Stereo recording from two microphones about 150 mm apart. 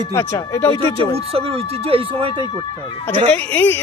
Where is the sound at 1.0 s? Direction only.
40° right (ahead or behind).